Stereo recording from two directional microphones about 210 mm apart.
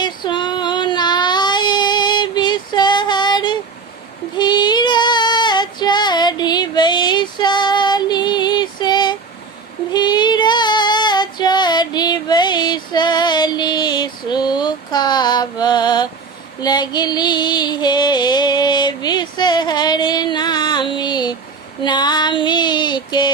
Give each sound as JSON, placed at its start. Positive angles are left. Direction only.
{"t": 0.0, "sound": "child singing", "side_deg": 20}
{"t": 9.9, "sound": "female singing", "side_deg": 20}
{"t": 16.6, "sound": "music", "side_deg": 20}
{"t": 21.8, "sound": "female singing", "side_deg": 20}